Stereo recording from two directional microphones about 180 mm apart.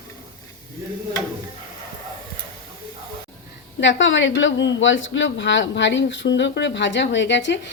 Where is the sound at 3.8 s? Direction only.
90° left.